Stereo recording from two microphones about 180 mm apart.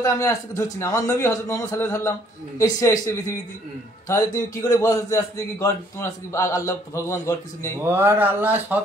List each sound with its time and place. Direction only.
0.0 s a man's voice: 15° left (ahead or behind)
4.1 s a man's voice: 20° left (ahead or behind)
7.8 s speech: 15° right (ahead or behind)